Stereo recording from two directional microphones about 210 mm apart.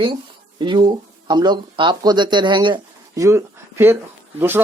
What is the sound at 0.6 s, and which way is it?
Speech, 20° right (ahead or behind).